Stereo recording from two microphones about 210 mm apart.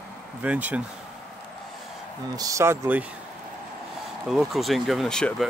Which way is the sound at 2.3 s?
15° right (ahead or behind).